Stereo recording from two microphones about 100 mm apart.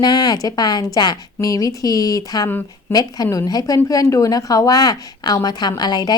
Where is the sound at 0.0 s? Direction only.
45° left (ahead or behind).